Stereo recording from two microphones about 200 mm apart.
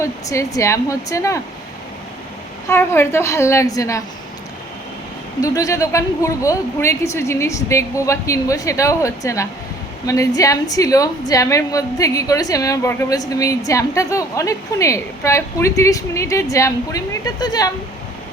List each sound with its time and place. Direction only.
0.0 s speech: 15° left (ahead or behind)
2.6 s speech: 15° left (ahead or behind)
5.4 s speech: 15° left (ahead or behind)